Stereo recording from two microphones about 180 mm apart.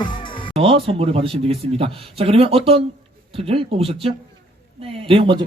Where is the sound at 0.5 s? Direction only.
30° right (ahead or behind).